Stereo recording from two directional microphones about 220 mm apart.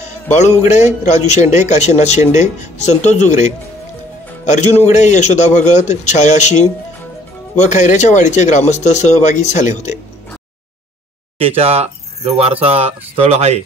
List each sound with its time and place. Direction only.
0.0 s a man's voice: 30° left (ahead or behind)
11.3 s speech: 25° right (ahead or behind)